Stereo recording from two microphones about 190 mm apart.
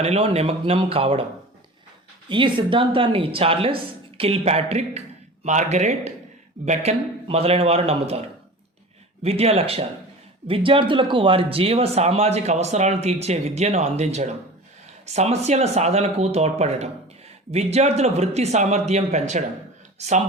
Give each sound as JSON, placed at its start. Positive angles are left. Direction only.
{"t": 0.0, "sound": "speech", "side_deg": -30}
{"t": 2.3, "sound": "a woman's voice", "side_deg": -25}
{"t": 9.2, "sound": "speech", "side_deg": -30}